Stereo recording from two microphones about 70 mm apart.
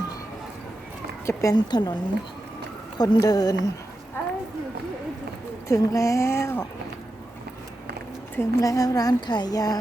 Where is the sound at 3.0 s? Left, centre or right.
Left.